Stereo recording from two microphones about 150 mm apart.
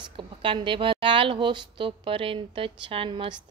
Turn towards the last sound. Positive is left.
turn(degrees=-35)  # may be behind; listen again after turning